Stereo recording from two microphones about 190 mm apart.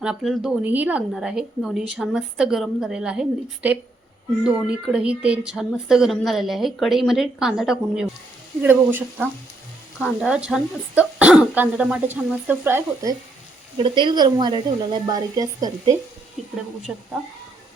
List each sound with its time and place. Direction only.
0.0 s a woman's voice: centre (ahead or behind)
13.7 s speech: 25° right (ahead or behind)